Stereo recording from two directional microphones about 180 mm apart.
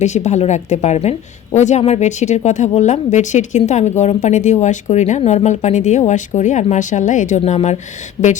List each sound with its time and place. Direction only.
0.0 s a woman's voice: 40° left (ahead or behind)